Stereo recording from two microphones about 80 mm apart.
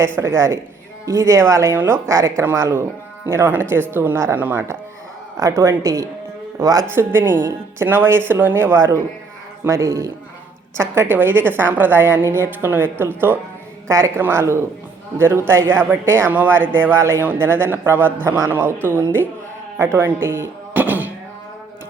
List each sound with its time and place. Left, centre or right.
0.0 s speech: right
1.7 s speech: right
2.0 s speech: right
5.4 s speech: right
6.9 s speech: right
10.8 s speech: right